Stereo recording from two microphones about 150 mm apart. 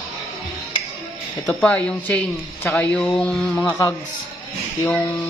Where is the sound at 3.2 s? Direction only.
5° left (ahead or behind).